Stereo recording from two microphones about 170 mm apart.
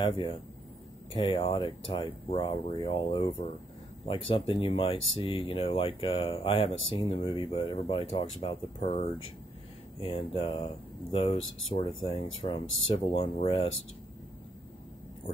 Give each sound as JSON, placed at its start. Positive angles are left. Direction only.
{"t": 0.0, "sound": "speech", "side_deg": 30}